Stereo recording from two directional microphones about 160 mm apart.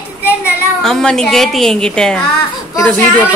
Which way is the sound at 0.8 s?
Centre (ahead or behind).